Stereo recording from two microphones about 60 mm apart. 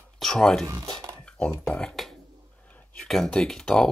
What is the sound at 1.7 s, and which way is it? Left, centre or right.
Speech, centre.